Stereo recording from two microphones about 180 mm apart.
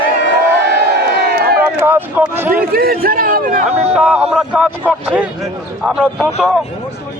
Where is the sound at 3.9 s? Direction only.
5° right (ahead or behind).